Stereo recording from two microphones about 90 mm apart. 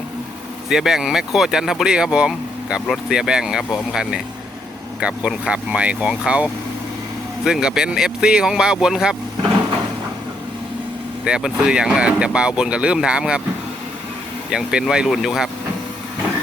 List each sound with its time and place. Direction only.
0.7 s speech: 5° right (ahead or behind)
11.3 s speech: 10° right (ahead or behind)
14.5 s speech: 10° right (ahead or behind)